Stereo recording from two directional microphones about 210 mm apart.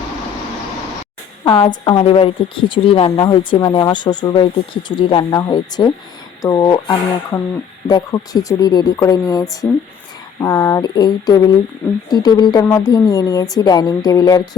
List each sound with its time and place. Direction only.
1.5 s a woman's voice: 20° left (ahead or behind)